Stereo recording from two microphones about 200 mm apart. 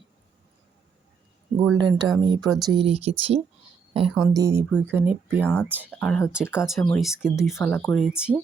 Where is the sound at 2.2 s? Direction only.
20° right (ahead or behind).